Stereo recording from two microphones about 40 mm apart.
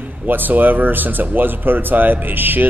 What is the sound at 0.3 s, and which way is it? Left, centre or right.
A man's voice, right.